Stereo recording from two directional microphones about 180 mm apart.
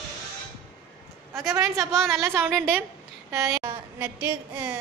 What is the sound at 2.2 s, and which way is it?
Speech, 15° right (ahead or behind).